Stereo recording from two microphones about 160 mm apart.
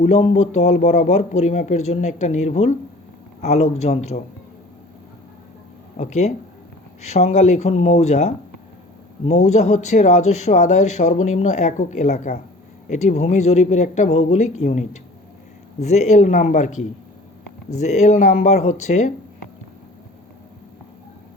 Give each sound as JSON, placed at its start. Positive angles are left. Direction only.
{"t": 0.0, "sound": "speech", "side_deg": 45}
{"t": 6.0, "sound": "speech", "side_deg": 45}